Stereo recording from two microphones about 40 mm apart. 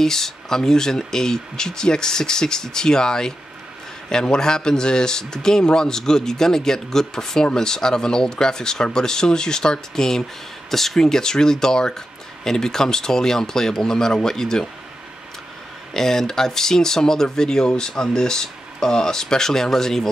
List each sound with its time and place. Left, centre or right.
0.0 s speech: centre
15.9 s speech: centre